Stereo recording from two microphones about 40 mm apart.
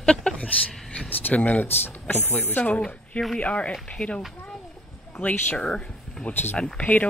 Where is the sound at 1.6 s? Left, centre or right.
Left.